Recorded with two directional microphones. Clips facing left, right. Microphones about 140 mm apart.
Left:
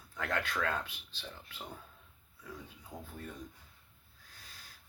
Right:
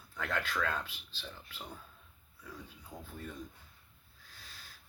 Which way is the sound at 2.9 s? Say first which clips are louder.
Left 1 dB; centre (ahead or behind).